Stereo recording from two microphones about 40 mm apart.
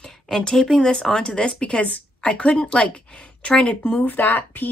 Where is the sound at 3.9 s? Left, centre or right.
Left.